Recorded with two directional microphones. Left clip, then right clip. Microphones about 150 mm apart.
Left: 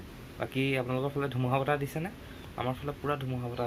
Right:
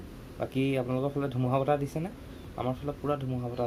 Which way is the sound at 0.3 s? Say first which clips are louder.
Right 1 dB; 10° right (ahead or behind).